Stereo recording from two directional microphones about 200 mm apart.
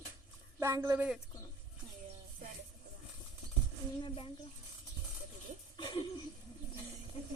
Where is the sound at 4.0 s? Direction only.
25° left (ahead or behind).